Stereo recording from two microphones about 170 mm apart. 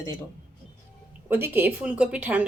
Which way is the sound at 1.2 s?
10° right (ahead or behind).